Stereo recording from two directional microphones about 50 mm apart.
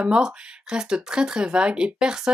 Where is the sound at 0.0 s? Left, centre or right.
Centre.